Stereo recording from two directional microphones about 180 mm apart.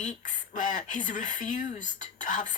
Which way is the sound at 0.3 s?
45° left (ahead or behind).